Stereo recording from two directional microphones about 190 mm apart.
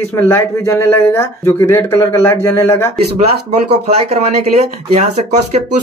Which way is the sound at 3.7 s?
35° right (ahead or behind).